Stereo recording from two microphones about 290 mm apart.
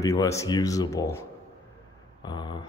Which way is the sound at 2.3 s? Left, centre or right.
Centre.